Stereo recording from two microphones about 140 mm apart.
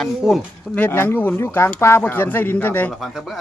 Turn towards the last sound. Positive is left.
turn(degrees=0)  # may be behind; listen again after turning